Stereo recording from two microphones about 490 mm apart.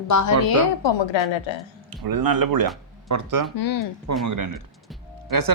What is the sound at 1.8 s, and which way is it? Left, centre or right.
Speech, right.